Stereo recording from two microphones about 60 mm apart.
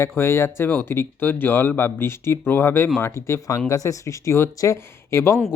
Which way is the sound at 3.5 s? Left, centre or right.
Left.